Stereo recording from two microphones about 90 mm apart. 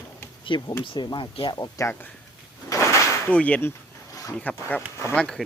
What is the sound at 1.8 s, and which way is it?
Speech, 40° left (ahead or behind).